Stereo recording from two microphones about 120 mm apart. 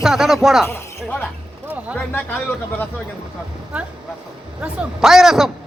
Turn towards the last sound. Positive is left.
turn(degrees=-5)  # may be behind; listen again after turning